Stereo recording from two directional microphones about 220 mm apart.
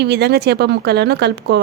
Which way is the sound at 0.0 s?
50° right (ahead or behind).